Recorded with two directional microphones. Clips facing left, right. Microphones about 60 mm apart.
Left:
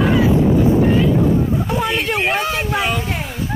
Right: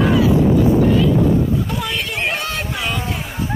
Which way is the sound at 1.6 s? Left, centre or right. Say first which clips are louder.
Left 4 dB; left.